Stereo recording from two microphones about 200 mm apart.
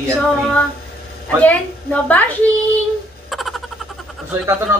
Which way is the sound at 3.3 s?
Centre (ahead or behind).